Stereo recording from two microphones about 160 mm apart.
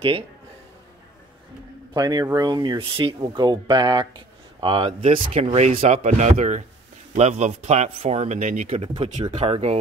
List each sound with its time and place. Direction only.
2.0 s speech: 25° right (ahead or behind); by 9.8 s 40° right (ahead or behind)